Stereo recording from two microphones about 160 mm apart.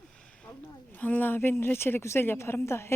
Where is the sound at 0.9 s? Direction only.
10° left (ahead or behind).